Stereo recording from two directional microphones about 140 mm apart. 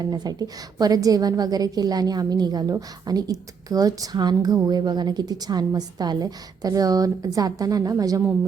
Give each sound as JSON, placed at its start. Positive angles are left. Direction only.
{"t": 0.0, "sound": "a woman's voice", "side_deg": -30}